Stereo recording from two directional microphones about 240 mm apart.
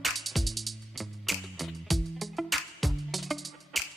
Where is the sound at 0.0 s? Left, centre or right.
Centre.